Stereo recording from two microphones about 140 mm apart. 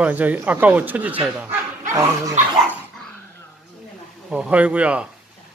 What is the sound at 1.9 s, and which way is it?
Speech, 20° right (ahead or behind).